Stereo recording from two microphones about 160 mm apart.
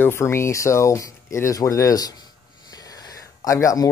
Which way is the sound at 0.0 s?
15° left (ahead or behind).